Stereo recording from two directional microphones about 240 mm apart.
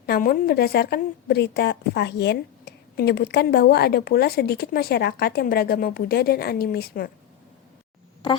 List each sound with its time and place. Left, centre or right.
0.0 s a woman's voice: left